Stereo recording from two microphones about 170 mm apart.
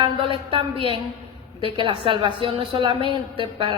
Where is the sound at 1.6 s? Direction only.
30° right (ahead or behind).